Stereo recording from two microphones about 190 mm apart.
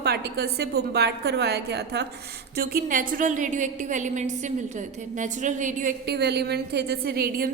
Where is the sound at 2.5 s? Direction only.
50° right (ahead or behind).